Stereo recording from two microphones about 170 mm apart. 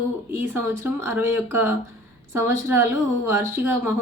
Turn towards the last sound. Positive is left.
turn(degrees=-15)  # may be behind; listen again after turning